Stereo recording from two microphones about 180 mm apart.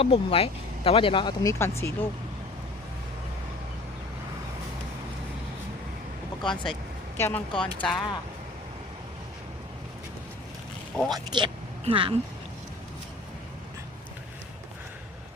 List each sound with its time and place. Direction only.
0.0 s speech: 30° left (ahead or behind); by 2.0 s 15° left (ahead or behind)
7.2 s speech: 10° left (ahead or behind)
10.9 s speech: 5° left (ahead or behind)
11.3 s a woman's voice: 25° right (ahead or behind)